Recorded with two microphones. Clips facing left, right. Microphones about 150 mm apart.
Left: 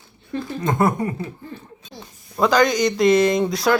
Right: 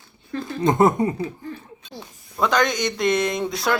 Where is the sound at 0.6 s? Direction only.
20° right (ahead or behind).